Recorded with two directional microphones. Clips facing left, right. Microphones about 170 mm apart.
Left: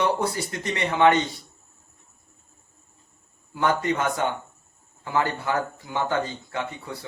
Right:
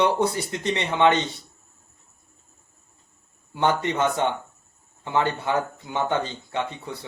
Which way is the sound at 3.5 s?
25° right (ahead or behind).